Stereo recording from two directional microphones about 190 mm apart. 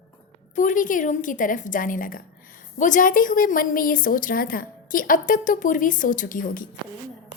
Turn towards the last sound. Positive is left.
turn(degrees=45)  # may be behind; listen again after turning